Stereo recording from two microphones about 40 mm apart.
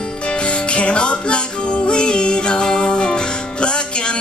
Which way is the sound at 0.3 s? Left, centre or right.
Left.